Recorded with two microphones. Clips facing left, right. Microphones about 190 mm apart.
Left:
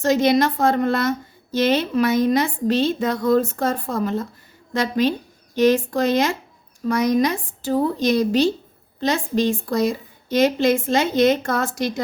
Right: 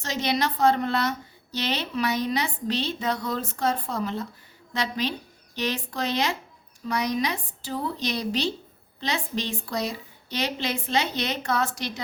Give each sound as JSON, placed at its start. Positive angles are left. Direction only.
{"t": 0.0, "sound": "a woman's voice", "side_deg": 50}